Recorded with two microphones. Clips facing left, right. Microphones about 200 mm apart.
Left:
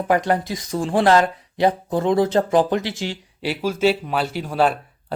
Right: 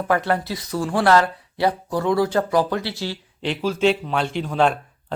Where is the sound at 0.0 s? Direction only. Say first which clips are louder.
Left 2 dB; 15° left (ahead or behind).